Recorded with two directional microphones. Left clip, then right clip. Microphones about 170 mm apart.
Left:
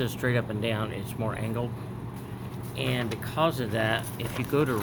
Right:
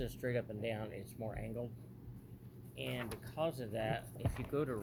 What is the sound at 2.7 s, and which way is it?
Speech, 20° right (ahead or behind).